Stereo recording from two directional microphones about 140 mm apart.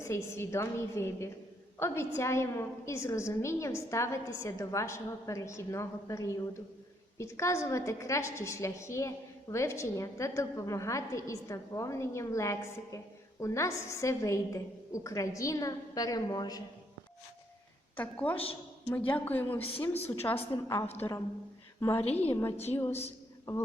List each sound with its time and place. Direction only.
0.0 s a woman's voice: 20° left (ahead or behind)
17.9 s a woman's voice: 10° left (ahead or behind)
19.5 s a woman's voice: 45° left (ahead or behind)
20.1 s a woman's voice: 15° left (ahead or behind)